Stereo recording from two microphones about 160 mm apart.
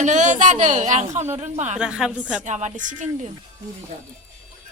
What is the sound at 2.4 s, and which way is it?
Speech, 50° right (ahead or behind).